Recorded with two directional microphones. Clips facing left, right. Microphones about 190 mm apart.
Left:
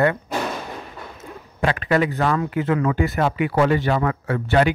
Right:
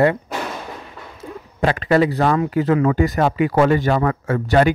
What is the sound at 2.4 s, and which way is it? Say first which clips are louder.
Speech: right 4 dB; 35° right (ahead or behind).